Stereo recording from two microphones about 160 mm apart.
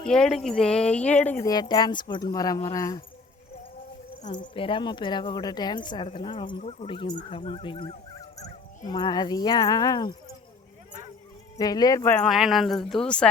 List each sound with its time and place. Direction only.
0.0 s speech: 5° left (ahead or behind)
1.5 s a woman's voice: 25° left (ahead or behind)
4.5 s a woman's voice: 35° left (ahead or behind)
6.6 s a woman's voice: 40° left (ahead or behind); by 10.2 s 25° left (ahead or behind)
11.5 s a woman's voice: 25° left (ahead or behind)
12.0 s speech: 5° left (ahead or behind)